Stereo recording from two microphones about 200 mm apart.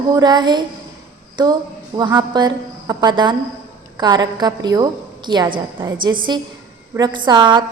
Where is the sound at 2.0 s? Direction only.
20° right (ahead or behind).